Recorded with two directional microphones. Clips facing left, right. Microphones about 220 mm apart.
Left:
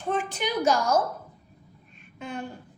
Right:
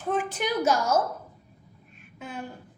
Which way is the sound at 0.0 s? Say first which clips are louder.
Right 1 dB; 5° right (ahead or behind).